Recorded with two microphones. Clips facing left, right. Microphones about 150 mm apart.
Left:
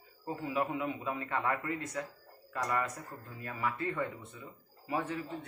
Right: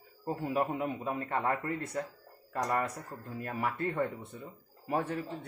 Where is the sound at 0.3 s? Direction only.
55° right (ahead or behind).